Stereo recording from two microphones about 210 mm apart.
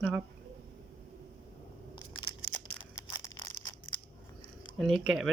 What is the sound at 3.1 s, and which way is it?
Crushing, 20° left (ahead or behind).